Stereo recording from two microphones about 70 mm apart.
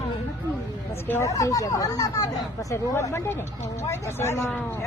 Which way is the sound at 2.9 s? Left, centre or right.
Left.